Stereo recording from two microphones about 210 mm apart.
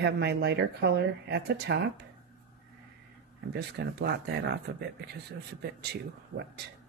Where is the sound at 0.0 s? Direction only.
55° right (ahead or behind).